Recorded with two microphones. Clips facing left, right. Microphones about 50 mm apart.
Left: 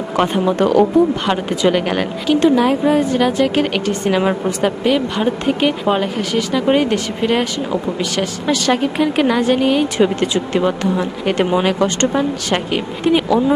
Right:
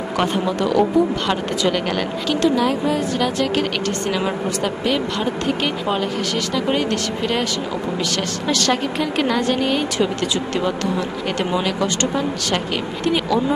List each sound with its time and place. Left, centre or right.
0.6 s speech: left
1.3 s a woman's voice: centre
4.9 s speech: centre
10.0 s a woman's voice: left